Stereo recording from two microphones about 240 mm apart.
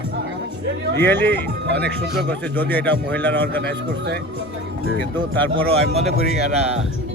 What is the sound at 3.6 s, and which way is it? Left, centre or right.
Speech, right.